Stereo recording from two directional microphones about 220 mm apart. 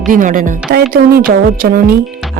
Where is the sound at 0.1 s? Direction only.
35° right (ahead or behind).